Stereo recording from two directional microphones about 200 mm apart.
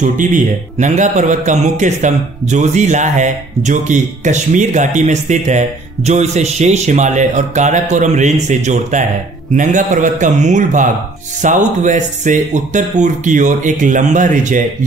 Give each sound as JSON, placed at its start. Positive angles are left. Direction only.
{"t": 0.0, "sound": "a man's voice", "side_deg": -40}